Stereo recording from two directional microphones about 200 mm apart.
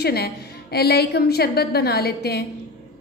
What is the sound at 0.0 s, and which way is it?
A woman's voice, 50° left (ahead or behind).